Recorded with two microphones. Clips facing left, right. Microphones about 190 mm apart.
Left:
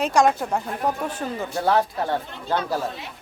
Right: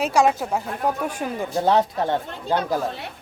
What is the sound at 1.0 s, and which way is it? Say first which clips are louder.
Speech: right 1 dB; 15° right (ahead or behind).